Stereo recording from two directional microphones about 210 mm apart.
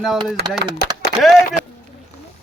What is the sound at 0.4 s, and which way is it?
Speech, 50° right (ahead or behind).